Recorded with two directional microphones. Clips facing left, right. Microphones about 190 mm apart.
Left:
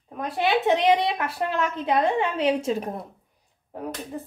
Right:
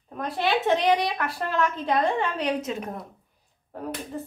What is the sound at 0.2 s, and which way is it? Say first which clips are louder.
Speech: left 2 dB; 15° left (ahead or behind).